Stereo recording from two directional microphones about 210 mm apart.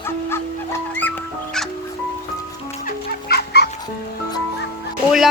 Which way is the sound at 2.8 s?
50° left (ahead or behind).